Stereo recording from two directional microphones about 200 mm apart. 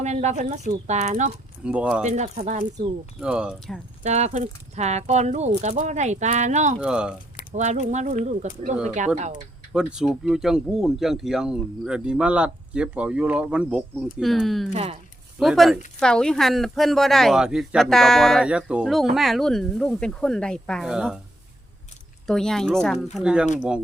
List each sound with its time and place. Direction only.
0.0 s speech: 35° right (ahead or behind)
1.6 s speech: 5° right (ahead or behind)
2.0 s speech: 35° right (ahead or behind)
3.2 s speech: 5° right (ahead or behind)
4.0 s speech: 35° right (ahead or behind)
6.7 s speech: 5° right (ahead or behind)
7.5 s speech: 35° right (ahead or behind)
9.7 s speech: 5° right (ahead or behind)
14.7 s speech: 30° right (ahead or behind)
15.4 s speech: centre (ahead or behind)
22.3 s speech: centre (ahead or behind)